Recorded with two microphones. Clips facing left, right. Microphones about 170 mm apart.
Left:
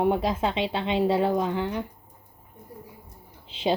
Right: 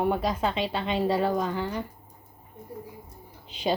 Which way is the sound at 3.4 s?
25° left (ahead or behind).